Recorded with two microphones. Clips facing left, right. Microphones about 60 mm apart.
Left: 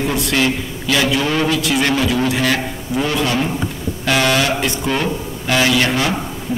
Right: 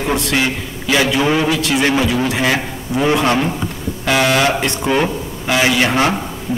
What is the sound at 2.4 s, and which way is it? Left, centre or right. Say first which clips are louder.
A man's voice: right 1 dB; centre.